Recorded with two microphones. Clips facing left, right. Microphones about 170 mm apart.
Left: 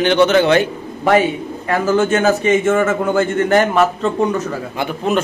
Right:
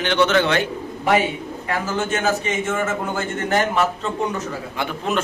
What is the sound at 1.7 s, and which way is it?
A man's voice, 55° left (ahead or behind).